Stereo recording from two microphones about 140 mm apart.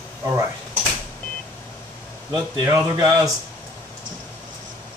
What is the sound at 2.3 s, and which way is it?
Speech, 25° right (ahead or behind).